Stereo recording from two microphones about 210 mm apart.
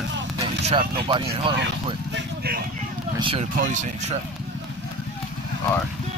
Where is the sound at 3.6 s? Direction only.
35° right (ahead or behind).